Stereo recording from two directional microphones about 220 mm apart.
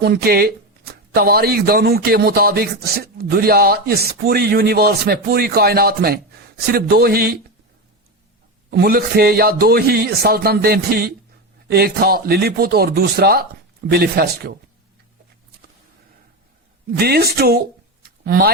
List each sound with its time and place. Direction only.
0.0 s speech: 45° right (ahead or behind)
8.7 s speech: 45° right (ahead or behind)
17.0 s speech: 45° right (ahead or behind)